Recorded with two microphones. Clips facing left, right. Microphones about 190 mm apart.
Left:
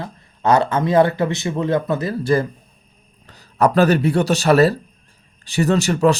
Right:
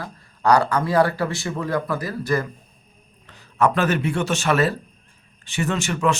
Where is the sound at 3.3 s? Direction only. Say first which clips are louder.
Left 3 dB; 35° left (ahead or behind).